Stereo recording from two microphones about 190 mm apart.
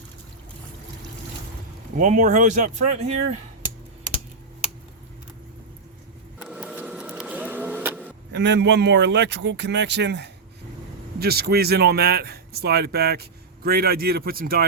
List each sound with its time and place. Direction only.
2.0 s speech: 40° right (ahead or behind)
6.4 s printer: 5° right (ahead or behind)
8.3 s speech: 65° right (ahead or behind)